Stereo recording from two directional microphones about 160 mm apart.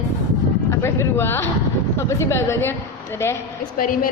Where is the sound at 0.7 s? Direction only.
15° left (ahead or behind).